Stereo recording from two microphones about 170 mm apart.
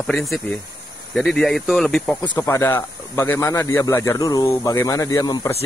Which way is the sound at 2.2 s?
20° left (ahead or behind).